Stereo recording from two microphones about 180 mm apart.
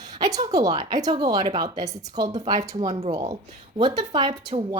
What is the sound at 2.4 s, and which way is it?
Speech, 20° right (ahead or behind).